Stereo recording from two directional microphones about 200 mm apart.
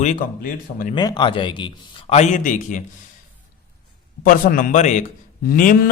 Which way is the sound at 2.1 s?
35° left (ahead or behind).